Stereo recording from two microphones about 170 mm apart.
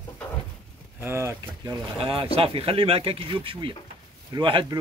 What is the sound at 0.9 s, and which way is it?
Speech, 15° right (ahead or behind).